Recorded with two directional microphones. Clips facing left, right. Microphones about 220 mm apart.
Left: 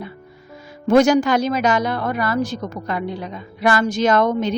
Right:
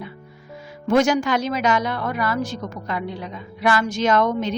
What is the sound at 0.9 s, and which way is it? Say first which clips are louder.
A woman's voice: left 4 dB; 35° left (ahead or behind).